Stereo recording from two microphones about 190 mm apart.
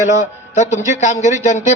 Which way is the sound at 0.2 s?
40° left (ahead or behind).